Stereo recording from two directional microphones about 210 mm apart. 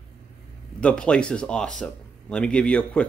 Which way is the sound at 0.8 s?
5° left (ahead or behind).